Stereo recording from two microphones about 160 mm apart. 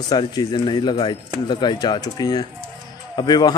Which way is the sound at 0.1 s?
25° left (ahead or behind).